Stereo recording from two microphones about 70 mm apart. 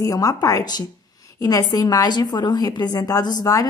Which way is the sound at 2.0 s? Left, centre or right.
Left.